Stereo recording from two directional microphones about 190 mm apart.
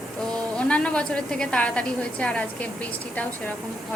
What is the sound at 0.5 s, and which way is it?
A woman's voice, 5° left (ahead or behind).